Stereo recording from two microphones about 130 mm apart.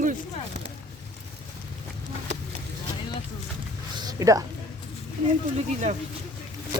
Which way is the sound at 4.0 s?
30° right (ahead or behind).